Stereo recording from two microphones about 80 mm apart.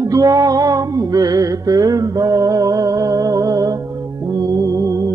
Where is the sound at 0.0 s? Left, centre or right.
Right.